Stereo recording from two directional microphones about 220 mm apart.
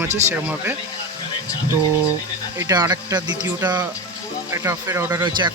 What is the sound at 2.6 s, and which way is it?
Speech, 15° right (ahead or behind).